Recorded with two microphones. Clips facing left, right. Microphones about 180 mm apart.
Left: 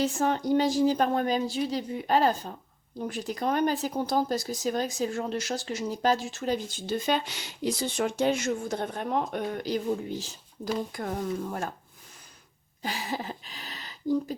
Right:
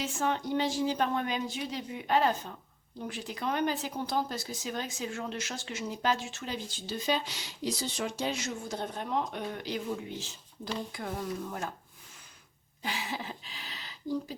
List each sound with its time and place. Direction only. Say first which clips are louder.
0.0 s speech: left 5 dB; 40° left (ahead or behind)
12.8 s speech: left 4 dB; 40° left (ahead or behind)